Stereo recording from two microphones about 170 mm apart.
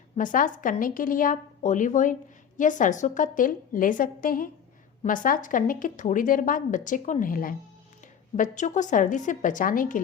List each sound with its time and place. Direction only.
0.2 s speech: 50° left (ahead or behind)